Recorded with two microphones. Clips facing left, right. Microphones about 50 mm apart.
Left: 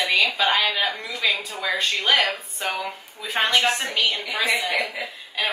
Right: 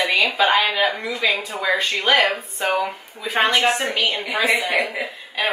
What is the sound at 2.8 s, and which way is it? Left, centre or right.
A woman's voice, centre.